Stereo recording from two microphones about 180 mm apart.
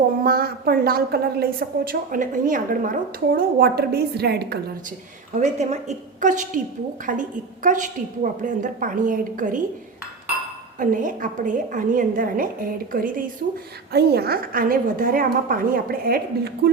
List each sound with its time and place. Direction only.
0.3 s a woman's voice: 55° right (ahead or behind)
5.4 s a woman's voice: 40° right (ahead or behind)
10.8 s a woman's voice: 50° right (ahead or behind)
13.9 s a woman's voice: 60° right (ahead or behind)